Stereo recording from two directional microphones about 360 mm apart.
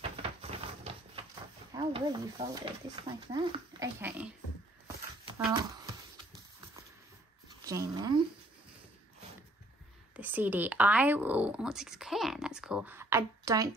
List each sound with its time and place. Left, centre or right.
0.0 s a sound: centre
1.7 s speech: centre
7.6 s speech: centre
10.1 s speech: centre